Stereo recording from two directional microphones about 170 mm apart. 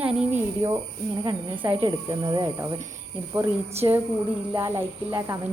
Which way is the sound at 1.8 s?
25° right (ahead or behind).